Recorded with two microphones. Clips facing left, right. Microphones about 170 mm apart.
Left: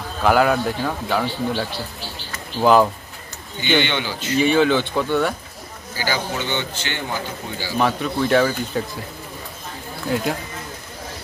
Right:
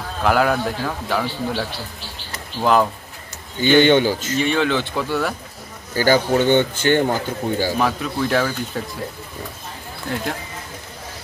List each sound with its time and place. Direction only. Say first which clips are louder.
0.2 s a man's voice: left 1 dB; centre (ahead or behind)
3.6 s speech: right 8 dB; 45° right (ahead or behind)
4.4 s a man's voice: left 5 dB; centre (ahead or behind)
5.9 s speech: right 9 dB; 50° right (ahead or behind)
7.8 s a man's voice: left 1 dB; centre (ahead or behind)